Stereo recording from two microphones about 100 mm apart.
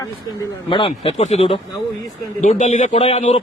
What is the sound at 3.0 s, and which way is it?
Speech, 80° left.